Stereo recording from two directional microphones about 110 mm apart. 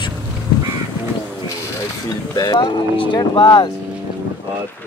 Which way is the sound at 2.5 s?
45° left (ahead or behind).